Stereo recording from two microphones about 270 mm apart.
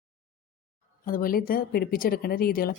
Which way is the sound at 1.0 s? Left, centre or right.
Left.